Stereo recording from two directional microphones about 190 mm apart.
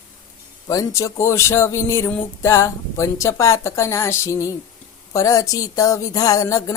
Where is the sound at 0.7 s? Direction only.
15° left (ahead or behind).